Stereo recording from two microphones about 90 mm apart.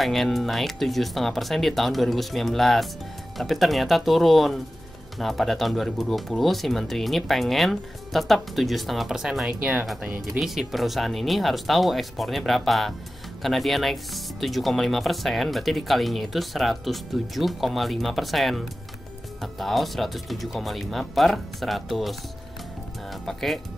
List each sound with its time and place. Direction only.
0.0 s speech: centre (ahead or behind); by 9.8 s 15° right (ahead or behind)
10.4 s speech: 5° right (ahead or behind)
23.2 s speech: centre (ahead or behind)